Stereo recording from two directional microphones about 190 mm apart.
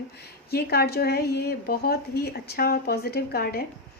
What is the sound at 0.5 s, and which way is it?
A woman's voice, 55° left (ahead or behind).